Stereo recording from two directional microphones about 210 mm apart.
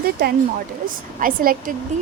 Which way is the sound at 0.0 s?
50° right (ahead or behind).